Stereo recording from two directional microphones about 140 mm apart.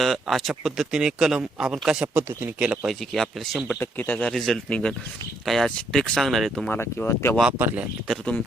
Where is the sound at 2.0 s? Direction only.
15° right (ahead or behind); by 3.7 s centre (ahead or behind).